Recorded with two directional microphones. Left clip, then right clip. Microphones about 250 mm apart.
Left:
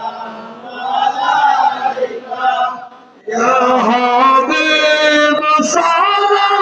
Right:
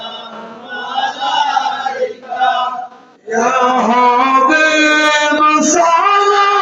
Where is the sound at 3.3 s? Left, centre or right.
Left.